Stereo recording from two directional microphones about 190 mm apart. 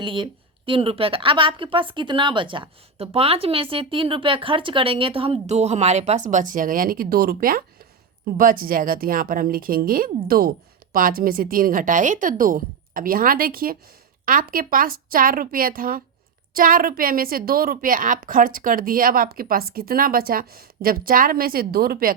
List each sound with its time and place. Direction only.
0.0 s a woman's voice: 25° right (ahead or behind); by 22.1 s 50° right (ahead or behind)